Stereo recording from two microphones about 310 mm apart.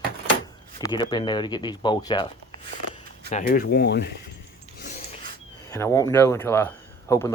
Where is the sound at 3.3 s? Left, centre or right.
Left.